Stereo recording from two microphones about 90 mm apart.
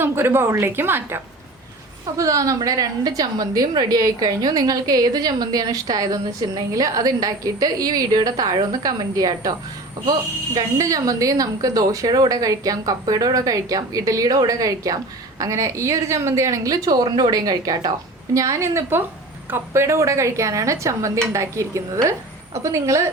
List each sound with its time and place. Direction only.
0.0 s a woman's voice: 25° right (ahead or behind)
2.1 s a woman's voice: 40° right (ahead or behind)
18.3 s speech: 35° right (ahead or behind)